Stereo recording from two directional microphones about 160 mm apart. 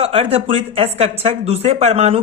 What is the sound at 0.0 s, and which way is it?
Speech, 35° right (ahead or behind).